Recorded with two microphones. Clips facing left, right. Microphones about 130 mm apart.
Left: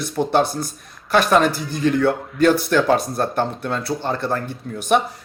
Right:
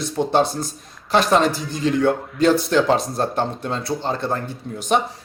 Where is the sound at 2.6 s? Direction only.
25° right (ahead or behind).